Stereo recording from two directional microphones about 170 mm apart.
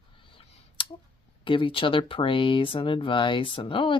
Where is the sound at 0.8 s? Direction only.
30° left (ahead or behind).